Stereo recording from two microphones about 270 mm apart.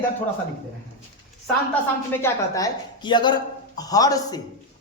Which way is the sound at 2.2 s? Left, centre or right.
Centre.